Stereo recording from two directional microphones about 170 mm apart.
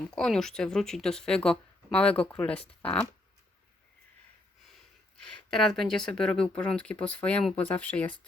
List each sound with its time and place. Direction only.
0.1 s speech: centre (ahead or behind)
5.5 s speech: 5° left (ahead or behind)